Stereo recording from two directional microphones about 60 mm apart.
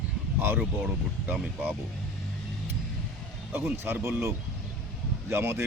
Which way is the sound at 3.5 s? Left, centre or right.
Right.